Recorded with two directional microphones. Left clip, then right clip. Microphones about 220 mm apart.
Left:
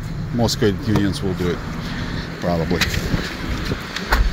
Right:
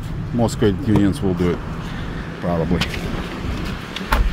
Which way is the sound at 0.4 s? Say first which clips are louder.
Even; 5° right (ahead or behind).